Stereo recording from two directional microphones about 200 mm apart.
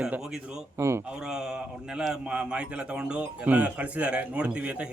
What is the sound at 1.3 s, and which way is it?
Speech, 5° right (ahead or behind).